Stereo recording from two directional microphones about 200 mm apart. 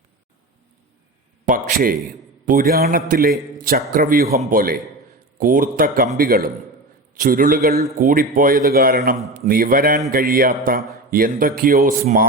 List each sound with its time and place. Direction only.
1.5 s speech: 45° right (ahead or behind)